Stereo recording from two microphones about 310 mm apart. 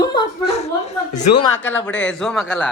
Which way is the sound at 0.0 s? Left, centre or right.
Centre.